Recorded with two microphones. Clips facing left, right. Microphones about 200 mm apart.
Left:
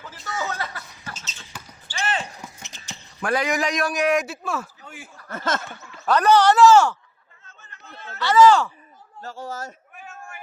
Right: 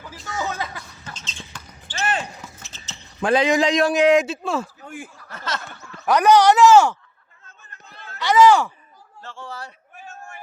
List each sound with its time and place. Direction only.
0.4 s music: 15° right (ahead or behind)
1.0 s basketball bounce: 5° left (ahead or behind)
2.6 s horse: 15° left (ahead or behind)
3.2 s a man's voice: 25° right (ahead or behind)
4.8 s chuckle: 50° right (ahead or behind)
5.3 s a sound: 50° left (ahead or behind)
6.1 s speech: 15° right (ahead or behind)
8.2 s speech: 15° right (ahead or behind)
9.2 s speech: 40° left (ahead or behind)